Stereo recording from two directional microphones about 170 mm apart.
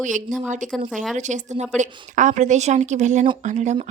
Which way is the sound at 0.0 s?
50° right (ahead or behind).